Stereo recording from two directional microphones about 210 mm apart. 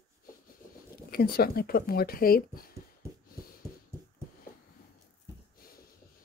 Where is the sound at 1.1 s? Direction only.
45° left (ahead or behind).